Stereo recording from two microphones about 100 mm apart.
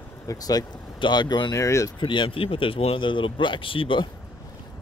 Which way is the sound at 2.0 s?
55° left (ahead or behind).